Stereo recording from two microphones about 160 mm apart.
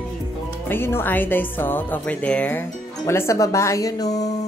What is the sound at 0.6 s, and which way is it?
A woman's voice, 15° left (ahead or behind).